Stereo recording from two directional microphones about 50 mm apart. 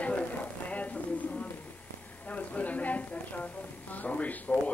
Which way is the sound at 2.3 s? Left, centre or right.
Left.